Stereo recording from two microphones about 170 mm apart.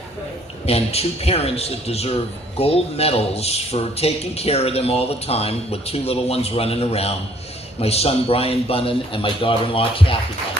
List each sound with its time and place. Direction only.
0.6 s a man's voice: 35° left (ahead or behind)